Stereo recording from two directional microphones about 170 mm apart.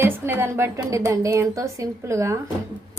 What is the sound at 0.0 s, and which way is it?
A woman's voice, 15° right (ahead or behind).